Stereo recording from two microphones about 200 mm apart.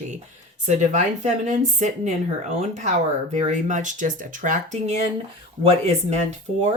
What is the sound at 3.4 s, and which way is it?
Speech, 35° right (ahead or behind).